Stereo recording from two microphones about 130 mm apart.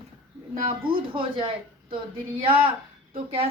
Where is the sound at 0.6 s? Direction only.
45° right (ahead or behind).